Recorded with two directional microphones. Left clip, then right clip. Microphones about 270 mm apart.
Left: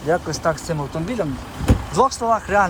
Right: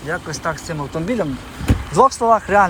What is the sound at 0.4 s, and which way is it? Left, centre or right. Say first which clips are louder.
Speech: left 2 dB; centre.